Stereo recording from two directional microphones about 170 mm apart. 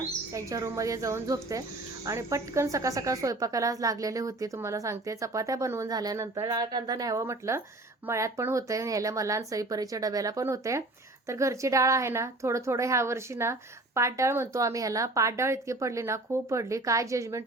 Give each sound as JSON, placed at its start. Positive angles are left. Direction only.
{"t": 0.3, "sound": "a woman's voice", "side_deg": -20}